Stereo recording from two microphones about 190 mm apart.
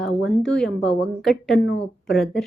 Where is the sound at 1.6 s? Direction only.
75° left (ahead or behind).